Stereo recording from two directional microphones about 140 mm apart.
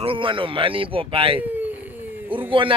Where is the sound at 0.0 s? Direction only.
40° right (ahead or behind).